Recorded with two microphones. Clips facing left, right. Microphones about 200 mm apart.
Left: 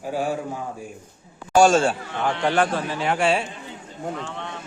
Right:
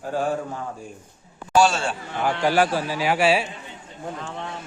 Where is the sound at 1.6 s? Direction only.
45° left (ahead or behind).